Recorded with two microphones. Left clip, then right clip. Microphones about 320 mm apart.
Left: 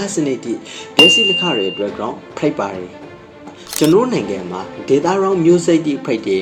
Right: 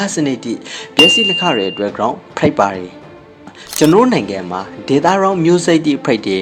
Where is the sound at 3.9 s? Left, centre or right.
Right.